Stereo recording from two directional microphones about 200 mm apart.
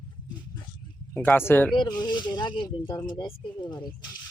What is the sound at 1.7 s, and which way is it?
Speech, 20° left (ahead or behind).